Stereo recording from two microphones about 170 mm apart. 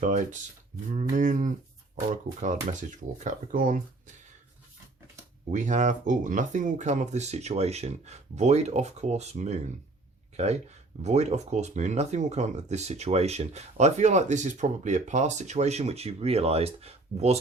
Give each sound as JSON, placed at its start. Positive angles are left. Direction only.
{"t": 0.0, "sound": "speech", "side_deg": -45}
{"t": 5.5, "sound": "speech", "side_deg": -45}